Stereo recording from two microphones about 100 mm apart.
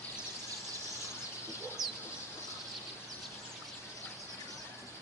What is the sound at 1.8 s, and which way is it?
Chicken, 5° right (ahead or behind).